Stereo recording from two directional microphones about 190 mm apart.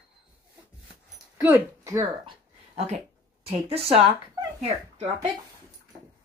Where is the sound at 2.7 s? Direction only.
35° right (ahead or behind).